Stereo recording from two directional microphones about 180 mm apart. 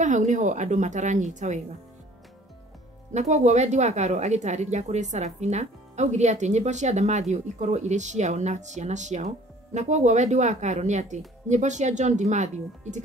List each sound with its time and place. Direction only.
0.0 s speech: 45° right (ahead or behind)
3.1 s speech: 40° right (ahead or behind)